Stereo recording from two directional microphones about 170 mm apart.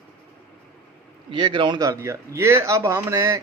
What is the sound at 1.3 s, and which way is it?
Speech, 25° right (ahead or behind).